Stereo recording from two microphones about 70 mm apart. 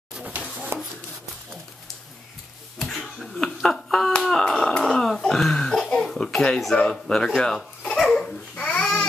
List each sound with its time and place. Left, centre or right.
0.2 s a sound: right
2.8 s finger snapping: centre
8.0 s babbling: centre
8.5 s babbling: centre